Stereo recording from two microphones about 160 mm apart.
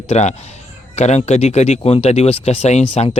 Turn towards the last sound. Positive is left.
turn(degrees=40)  # may be behind; listen again after turning